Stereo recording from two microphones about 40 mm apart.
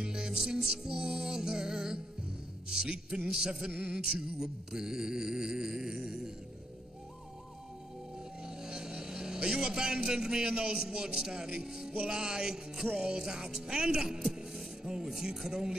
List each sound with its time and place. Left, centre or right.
0.0 s music: centre
2.7 s speech: right
8.5 s a man's voice: centre